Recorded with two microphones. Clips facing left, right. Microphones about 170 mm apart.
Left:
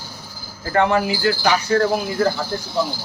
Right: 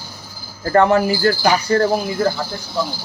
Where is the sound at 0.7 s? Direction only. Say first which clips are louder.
Right 4 dB; 45° right (ahead or behind).